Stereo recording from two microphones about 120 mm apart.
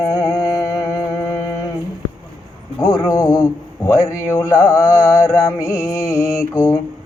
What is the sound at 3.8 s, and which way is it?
Mantra, 25° left (ahead or behind).